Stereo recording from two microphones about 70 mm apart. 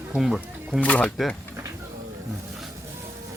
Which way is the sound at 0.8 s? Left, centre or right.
Centre.